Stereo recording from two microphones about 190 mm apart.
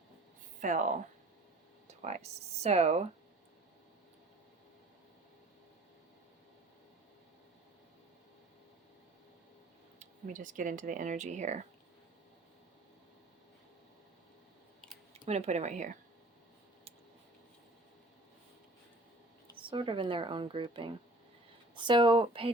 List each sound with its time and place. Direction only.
0.6 s speech: 40° right (ahead or behind)
10.0 s speech: 45° right (ahead or behind)
15.3 s speech: 35° right (ahead or behind)
19.5 s a woman's voice: 25° right (ahead or behind)